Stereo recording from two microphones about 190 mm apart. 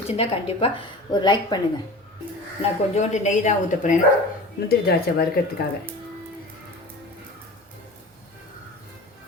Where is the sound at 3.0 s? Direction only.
40° left (ahead or behind).